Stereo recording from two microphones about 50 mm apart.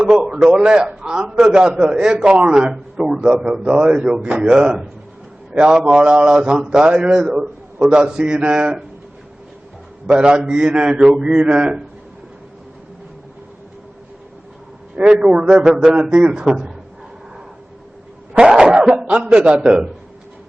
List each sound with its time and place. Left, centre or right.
0.0 s a man's voice: centre
10.1 s a man's voice: centre
14.9 s a man's voice: right
18.3 s cough: centre
19.3 s a man's voice: right